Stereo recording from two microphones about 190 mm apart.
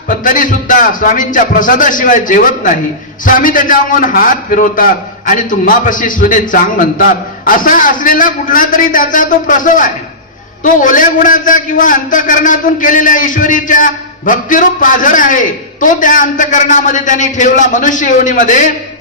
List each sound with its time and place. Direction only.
0.1 s a man's voice: 45° left (ahead or behind)